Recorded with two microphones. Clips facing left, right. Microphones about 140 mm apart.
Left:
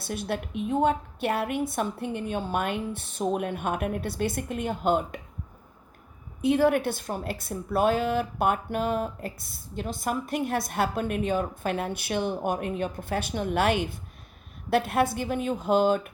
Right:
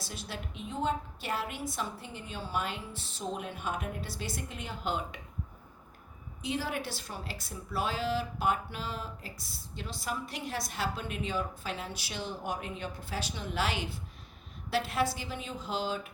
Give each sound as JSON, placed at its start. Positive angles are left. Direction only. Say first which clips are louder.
{"t": 0.0, "sound": "a woman's voice", "louder": "left 11 dB", "side_deg": 60}
{"t": 6.4, "sound": "a woman's voice", "louder": "left 13 dB", "side_deg": 55}